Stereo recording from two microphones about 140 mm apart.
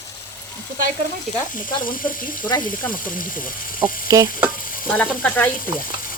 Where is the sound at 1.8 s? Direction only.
85° left.